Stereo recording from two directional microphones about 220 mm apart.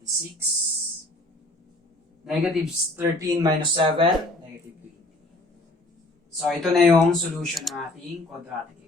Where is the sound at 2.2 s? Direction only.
5° right (ahead or behind).